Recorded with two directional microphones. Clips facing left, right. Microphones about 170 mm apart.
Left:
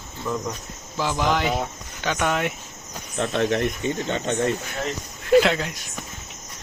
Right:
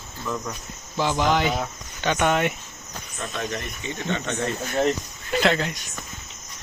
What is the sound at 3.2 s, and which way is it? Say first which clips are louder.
Speech: left 9 dB; 65° left (ahead or behind).